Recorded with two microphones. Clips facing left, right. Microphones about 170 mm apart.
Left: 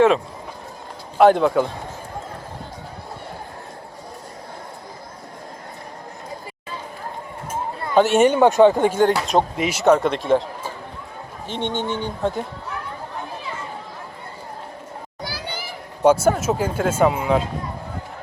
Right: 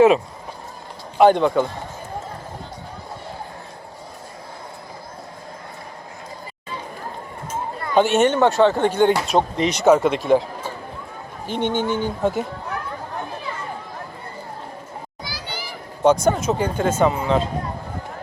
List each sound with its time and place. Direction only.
1.2 s speech: centre (ahead or behind)
8.1 s speech: 10° left (ahead or behind)
11.4 s speech: centre (ahead or behind)
15.2 s children playing: 60° left (ahead or behind)
16.0 s speech: 5° left (ahead or behind)